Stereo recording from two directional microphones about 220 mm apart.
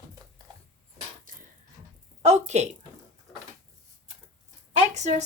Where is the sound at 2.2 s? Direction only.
30° right (ahead or behind).